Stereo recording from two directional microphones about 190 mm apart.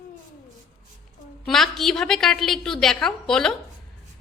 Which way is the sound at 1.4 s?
Centre (ahead or behind).